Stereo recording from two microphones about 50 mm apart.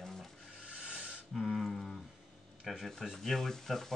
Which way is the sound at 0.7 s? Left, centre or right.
Centre.